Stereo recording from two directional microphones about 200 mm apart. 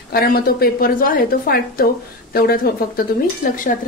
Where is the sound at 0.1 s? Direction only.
50° left (ahead or behind).